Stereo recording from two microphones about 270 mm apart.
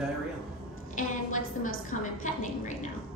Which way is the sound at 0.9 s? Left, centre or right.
Left.